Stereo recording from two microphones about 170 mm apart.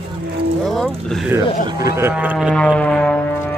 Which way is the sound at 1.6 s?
20° right (ahead or behind).